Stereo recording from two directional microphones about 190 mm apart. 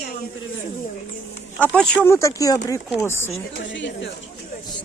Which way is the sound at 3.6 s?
70° left (ahead or behind).